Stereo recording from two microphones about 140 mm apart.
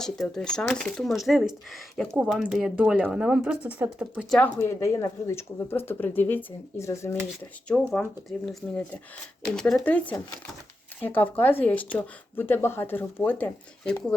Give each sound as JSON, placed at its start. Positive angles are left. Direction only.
{"t": 0.0, "sound": "speech", "side_deg": 5}
{"t": 4.3, "sound": "speech", "side_deg": 10}
{"t": 7.7, "sound": "speech", "side_deg": 5}